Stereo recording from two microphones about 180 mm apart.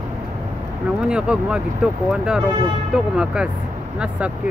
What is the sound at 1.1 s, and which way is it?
Speech, 5° right (ahead or behind).